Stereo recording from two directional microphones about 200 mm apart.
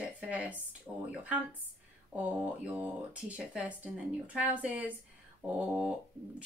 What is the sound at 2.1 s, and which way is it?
Speech, 5° right (ahead or behind).